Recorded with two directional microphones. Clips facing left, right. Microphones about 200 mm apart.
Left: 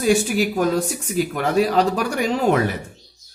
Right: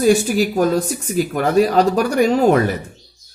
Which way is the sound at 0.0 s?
40° right (ahead or behind).